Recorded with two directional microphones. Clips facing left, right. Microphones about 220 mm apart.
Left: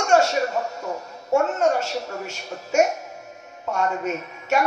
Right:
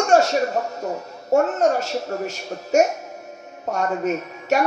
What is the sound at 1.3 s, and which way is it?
Speech, 35° right (ahead or behind).